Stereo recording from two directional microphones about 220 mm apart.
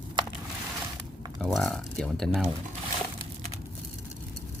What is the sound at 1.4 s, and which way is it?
Speech, centre (ahead or behind).